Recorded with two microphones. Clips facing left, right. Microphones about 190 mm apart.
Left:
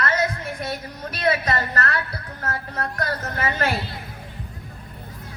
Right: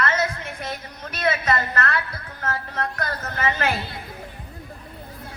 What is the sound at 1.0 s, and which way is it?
A woman's voice, 35° left (ahead or behind).